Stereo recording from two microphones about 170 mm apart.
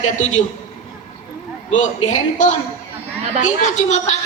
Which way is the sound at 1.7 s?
45° left (ahead or behind).